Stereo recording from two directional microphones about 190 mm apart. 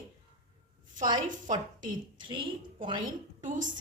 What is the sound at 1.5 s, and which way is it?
A woman's voice, 20° right (ahead or behind).